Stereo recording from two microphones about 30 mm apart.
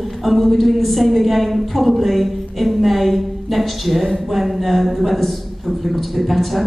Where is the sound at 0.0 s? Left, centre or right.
Centre.